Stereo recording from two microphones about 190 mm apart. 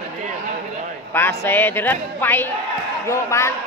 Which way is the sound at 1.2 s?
10° left (ahead or behind).